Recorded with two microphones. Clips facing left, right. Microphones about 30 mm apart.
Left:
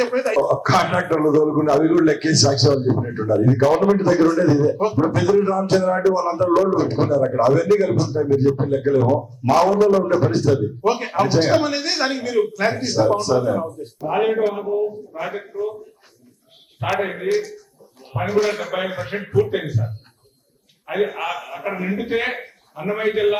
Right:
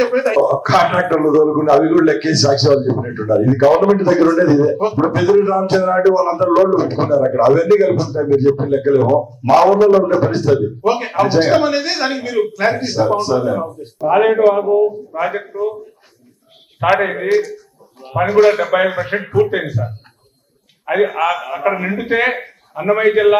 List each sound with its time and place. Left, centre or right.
0.0 s a man's voice: centre
3.6 s a man's voice: right
8.0 s speech: centre
8.3 s a man's voice: right
8.5 s a man's voice: centre; by 15.2 s right
15.2 s speech: centre
17.0 s a man's voice: right
17.3 s speech: centre
18.0 s a sound: centre
18.5 s speech: centre
20.9 s speech: centre
21.6 s a man's voice: right
21.8 s speech: centre